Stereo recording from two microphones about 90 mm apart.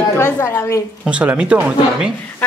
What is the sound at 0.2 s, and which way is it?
Speech, 30° left (ahead or behind).